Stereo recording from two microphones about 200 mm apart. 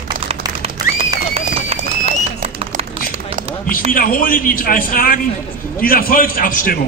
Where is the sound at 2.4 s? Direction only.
40° right (ahead or behind).